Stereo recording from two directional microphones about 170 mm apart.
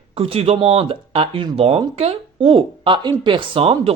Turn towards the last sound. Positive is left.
turn(degrees=-35)  # may be behind; listen again after turning